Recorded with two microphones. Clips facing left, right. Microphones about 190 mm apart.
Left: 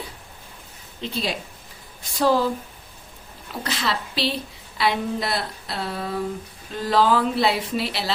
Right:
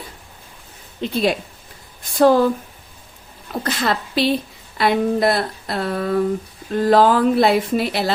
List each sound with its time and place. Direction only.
1.0 s speech: 55° right (ahead or behind)
3.5 s speech: 50° right (ahead or behind)